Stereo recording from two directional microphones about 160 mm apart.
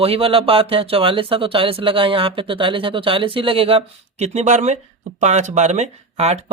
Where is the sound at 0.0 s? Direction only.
35° right (ahead or behind).